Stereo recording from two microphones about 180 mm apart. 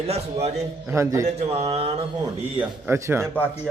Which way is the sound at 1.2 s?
35° right (ahead or behind).